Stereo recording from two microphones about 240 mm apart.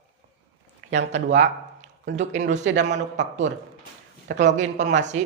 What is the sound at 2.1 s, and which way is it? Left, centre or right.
Speech, right.